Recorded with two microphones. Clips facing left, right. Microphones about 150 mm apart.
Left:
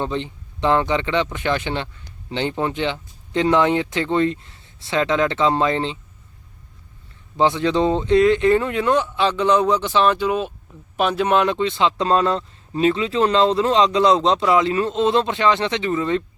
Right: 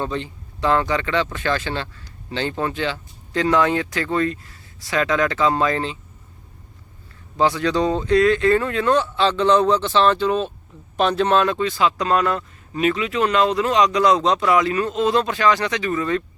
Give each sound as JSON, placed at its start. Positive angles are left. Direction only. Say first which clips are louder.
{"t": 0.0, "sound": "speech", "louder": "left 1 dB", "side_deg": 20}
{"t": 7.3, "sound": "speech", "louder": "left 1 dB", "side_deg": 20}